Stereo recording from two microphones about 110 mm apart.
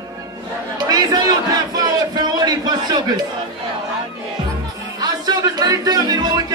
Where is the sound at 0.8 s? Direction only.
35° right (ahead or behind).